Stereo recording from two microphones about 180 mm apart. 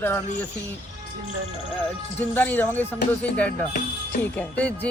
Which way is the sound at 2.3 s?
10° left (ahead or behind).